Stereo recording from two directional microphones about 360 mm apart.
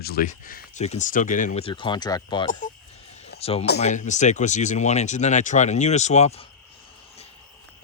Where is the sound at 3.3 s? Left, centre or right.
Centre.